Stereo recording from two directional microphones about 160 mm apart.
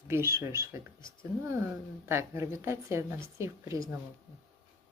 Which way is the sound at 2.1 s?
15° right (ahead or behind).